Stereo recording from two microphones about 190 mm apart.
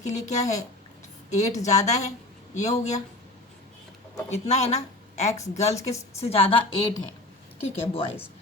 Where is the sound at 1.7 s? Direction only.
35° left (ahead or behind).